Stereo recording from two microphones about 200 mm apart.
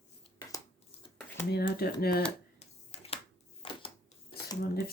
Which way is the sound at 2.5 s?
30° left (ahead or behind).